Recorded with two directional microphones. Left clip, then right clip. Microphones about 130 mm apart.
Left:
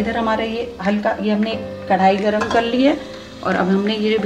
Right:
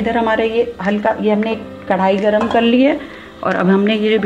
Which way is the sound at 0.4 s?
60° right (ahead or behind).